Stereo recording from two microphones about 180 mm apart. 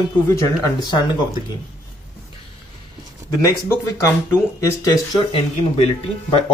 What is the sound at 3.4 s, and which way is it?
Speech, 20° left (ahead or behind).